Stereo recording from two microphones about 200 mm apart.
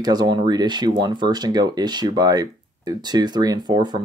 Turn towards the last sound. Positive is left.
turn(degrees=-20)  # may be behind; listen again after turning